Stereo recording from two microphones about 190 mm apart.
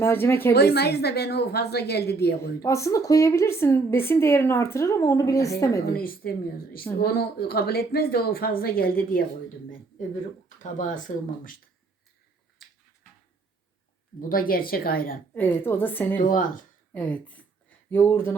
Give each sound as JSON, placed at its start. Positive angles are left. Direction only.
{"t": 0.0, "sound": "a woman's voice", "side_deg": 10}
{"t": 0.5, "sound": "a woman's voice", "side_deg": 55}
{"t": 2.6, "sound": "a woman's voice", "side_deg": 15}
{"t": 5.8, "sound": "speech", "side_deg": 50}
{"t": 10.6, "sound": "speech", "side_deg": 40}
{"t": 14.2, "sound": "speech", "side_deg": 50}
{"t": 15.4, "sound": "a woman's voice", "side_deg": 10}
{"t": 16.1, "sound": "speech", "side_deg": 45}
{"t": 16.9, "sound": "a woman's voice", "side_deg": 10}